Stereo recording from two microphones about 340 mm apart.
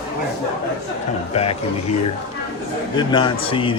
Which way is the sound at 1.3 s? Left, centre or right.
Centre.